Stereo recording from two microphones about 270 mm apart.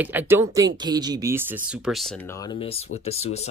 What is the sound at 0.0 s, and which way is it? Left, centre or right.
Speech, centre.